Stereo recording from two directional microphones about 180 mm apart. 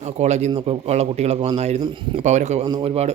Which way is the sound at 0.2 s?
40° right (ahead or behind).